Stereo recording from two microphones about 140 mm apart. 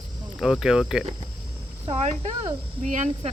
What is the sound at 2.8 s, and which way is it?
Speech, 60° right (ahead or behind).